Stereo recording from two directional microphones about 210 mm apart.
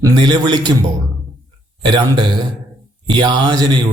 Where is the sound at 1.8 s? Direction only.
20° right (ahead or behind).